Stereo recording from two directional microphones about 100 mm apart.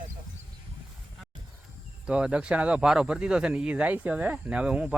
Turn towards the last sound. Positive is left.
turn(degrees=-10)  # may be behind; listen again after turning